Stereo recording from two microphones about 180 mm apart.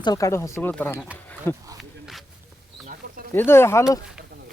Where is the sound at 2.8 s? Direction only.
50° right (ahead or behind).